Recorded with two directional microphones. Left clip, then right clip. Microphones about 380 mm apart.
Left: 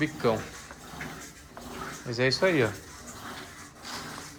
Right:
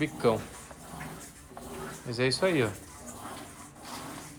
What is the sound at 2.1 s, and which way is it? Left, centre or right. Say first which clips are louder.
Speech: left 2 dB; centre.